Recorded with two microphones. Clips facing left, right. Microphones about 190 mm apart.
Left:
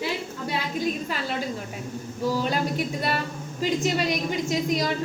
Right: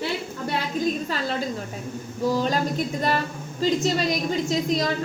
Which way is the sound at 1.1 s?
10° left (ahead or behind).